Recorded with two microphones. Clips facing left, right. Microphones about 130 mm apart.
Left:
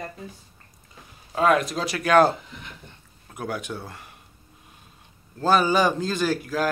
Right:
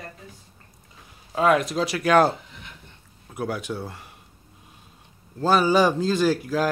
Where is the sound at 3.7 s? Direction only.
10° right (ahead or behind).